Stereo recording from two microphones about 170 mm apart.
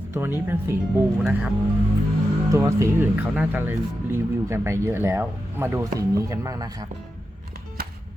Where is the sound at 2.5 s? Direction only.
15° right (ahead or behind).